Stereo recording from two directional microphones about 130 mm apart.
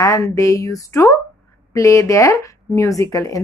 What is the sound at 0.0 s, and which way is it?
Speech, 25° left (ahead or behind).